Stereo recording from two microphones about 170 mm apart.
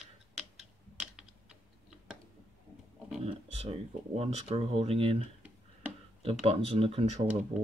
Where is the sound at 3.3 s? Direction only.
35° right (ahead or behind).